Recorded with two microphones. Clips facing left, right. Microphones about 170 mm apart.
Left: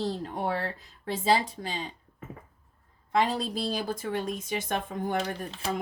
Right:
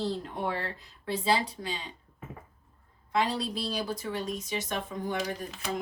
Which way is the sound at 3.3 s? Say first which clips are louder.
Left 2 dB; 50° left (ahead or behind).